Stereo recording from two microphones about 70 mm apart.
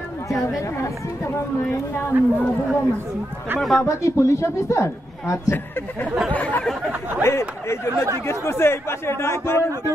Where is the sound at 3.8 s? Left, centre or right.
Left.